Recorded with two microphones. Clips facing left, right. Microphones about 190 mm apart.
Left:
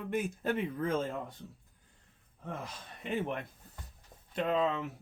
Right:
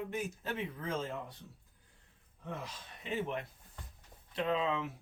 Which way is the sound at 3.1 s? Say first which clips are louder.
Left 2 dB; 55° left (ahead or behind).